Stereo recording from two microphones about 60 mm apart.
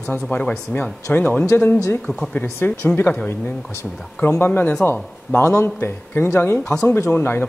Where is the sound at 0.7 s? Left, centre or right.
Left.